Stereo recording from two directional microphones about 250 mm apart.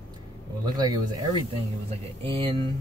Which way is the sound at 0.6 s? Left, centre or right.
Centre.